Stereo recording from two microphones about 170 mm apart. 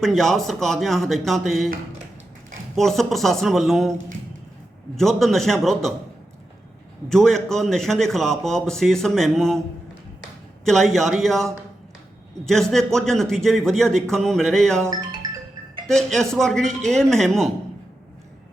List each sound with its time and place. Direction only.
0.0 s a man's voice: centre (ahead or behind)
2.7 s a man's voice: centre (ahead or behind)
4.9 s a man's voice: centre (ahead or behind)
7.1 s a man's voice: 5° left (ahead or behind)
10.7 s a man's voice: centre (ahead or behind)
12.5 s a man's voice: centre (ahead or behind)
15.2 s marimba: 20° right (ahead or behind)
15.9 s a man's voice: centre (ahead or behind)